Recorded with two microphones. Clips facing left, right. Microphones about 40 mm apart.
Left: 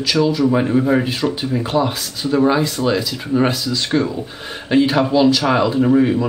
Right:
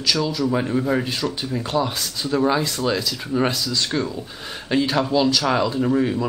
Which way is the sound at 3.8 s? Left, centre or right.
Left.